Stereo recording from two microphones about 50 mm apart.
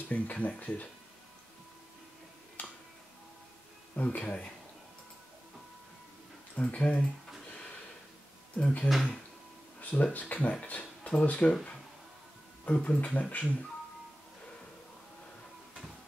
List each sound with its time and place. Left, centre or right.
0.1 s speech: left
2.6 s music: left
3.9 s speech: left
6.5 s speech: left
8.5 s speech: left
8.8 s speech: centre
9.8 s a sound: left
10.1 s speech: left
10.7 s a sound: left
11.1 s speech: left
12.7 s speech: centre
13.0 s speech: left